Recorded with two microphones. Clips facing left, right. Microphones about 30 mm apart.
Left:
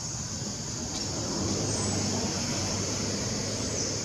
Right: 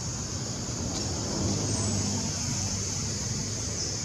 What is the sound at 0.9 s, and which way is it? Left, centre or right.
Vehicle, centre.